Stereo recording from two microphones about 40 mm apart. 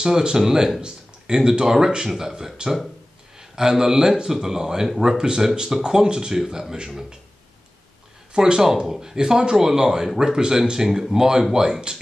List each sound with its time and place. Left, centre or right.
0.0 s speech: centre
5.1 s speech: right
8.3 s speech: centre